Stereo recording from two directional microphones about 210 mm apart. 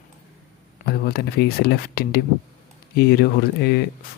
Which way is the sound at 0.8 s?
45° left (ahead or behind).